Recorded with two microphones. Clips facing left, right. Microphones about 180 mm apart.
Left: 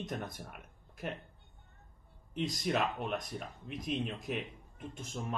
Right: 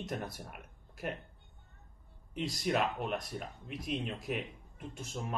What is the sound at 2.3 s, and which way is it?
Speech, 5° right (ahead or behind).